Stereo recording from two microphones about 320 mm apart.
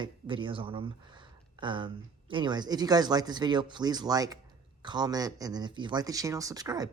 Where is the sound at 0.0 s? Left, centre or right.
Centre.